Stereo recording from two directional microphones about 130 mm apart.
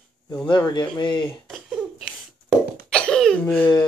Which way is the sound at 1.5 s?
Centre (ahead or behind).